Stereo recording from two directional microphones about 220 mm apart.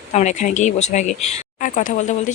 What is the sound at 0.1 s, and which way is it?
Speech, 30° left (ahead or behind).